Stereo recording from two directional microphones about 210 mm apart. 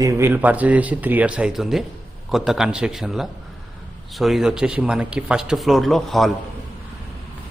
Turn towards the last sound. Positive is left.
turn(degrees=0)  # may be behind; listen again after turning